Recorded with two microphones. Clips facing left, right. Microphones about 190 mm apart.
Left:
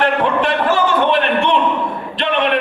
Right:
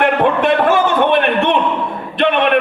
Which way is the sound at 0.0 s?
55° right (ahead or behind).